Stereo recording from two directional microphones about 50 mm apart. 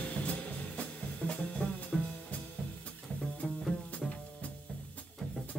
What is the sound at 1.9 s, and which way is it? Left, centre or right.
Music, centre.